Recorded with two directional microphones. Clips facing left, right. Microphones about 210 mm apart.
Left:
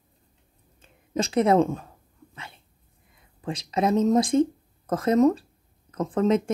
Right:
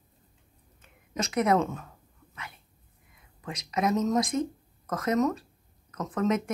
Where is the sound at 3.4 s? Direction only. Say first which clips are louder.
Left 4 dB; 30° left (ahead or behind).